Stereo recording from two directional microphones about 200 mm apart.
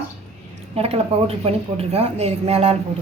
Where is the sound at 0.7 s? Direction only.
30° right (ahead or behind).